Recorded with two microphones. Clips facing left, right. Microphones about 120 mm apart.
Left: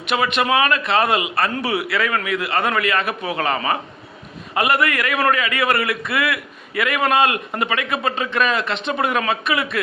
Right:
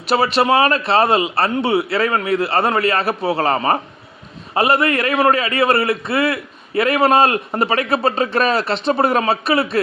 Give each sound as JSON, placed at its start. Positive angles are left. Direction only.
{"t": 0.0, "sound": "a man's voice", "side_deg": -35}